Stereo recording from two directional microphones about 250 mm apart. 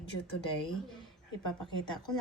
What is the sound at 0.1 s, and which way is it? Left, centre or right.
Speech, left.